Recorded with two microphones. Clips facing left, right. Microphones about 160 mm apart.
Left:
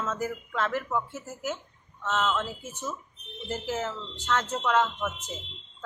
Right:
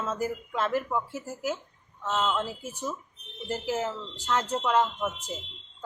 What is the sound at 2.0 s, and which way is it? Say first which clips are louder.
Speech: even; 15° right (ahead or behind).